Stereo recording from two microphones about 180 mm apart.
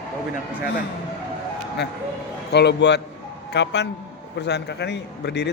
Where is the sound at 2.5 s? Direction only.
70° left (ahead or behind).